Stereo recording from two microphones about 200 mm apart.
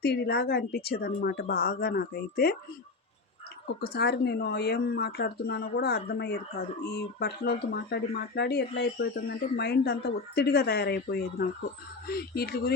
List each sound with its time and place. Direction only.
0.0 s speech: 55° left (ahead or behind)
3.9 s speech: 55° left (ahead or behind)